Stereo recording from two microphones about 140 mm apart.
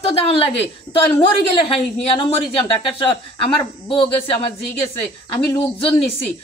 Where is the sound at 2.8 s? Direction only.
35° left (ahead or behind).